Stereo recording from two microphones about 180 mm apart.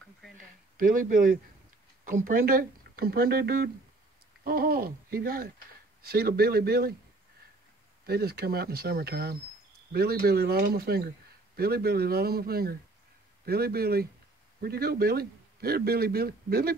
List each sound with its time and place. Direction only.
0.7 s speech: 50° right (ahead or behind)
8.1 s speech: 60° right (ahead or behind)